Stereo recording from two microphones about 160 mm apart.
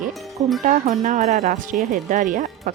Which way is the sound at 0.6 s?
50° right (ahead or behind).